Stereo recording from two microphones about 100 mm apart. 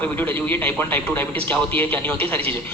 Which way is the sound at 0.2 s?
20° left (ahead or behind).